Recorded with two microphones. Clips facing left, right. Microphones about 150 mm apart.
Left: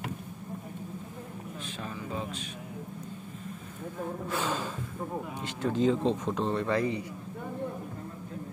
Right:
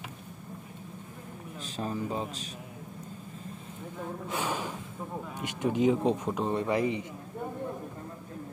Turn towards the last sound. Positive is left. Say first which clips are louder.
# even
turn(degrees=-20)  # may be behind; listen again after turning